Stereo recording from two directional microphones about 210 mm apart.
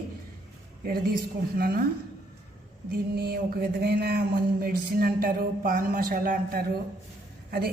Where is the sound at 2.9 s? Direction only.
45° right (ahead or behind).